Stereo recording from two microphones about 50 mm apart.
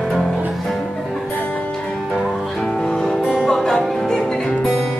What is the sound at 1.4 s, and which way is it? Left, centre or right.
Music, left.